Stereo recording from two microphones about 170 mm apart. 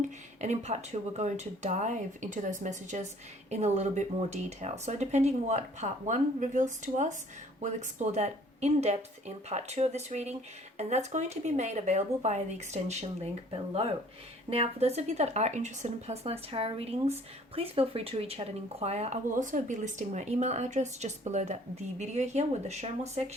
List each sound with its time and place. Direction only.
0.0 s speech: 40° right (ahead or behind)
14.5 s speech: 35° right (ahead or behind)